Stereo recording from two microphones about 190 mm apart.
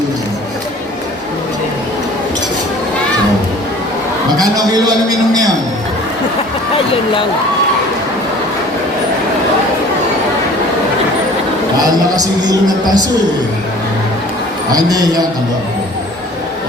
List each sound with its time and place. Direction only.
4.4 s a man's voice: 20° right (ahead or behind)
12.1 s speech: 20° right (ahead or behind)
14.7 s speech: 20° right (ahead or behind)